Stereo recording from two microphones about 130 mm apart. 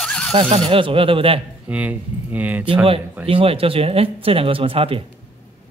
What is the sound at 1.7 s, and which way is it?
Speech, 10° right (ahead or behind).